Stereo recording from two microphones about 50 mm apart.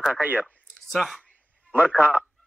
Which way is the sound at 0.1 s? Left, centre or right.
Right.